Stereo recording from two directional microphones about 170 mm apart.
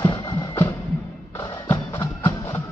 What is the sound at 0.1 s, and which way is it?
Music, 25° left (ahead or behind).